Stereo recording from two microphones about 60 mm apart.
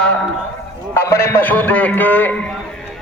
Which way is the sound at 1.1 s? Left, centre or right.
Left.